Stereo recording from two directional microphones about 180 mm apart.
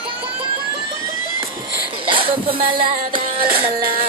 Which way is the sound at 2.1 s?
30° right (ahead or behind).